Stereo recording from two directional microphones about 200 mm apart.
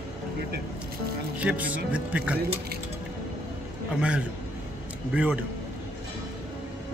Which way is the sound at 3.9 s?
5° right (ahead or behind).